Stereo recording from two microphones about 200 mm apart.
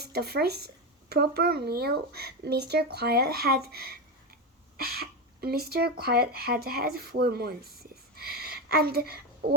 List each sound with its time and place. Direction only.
0.0 s speech: 55° right (ahead or behind)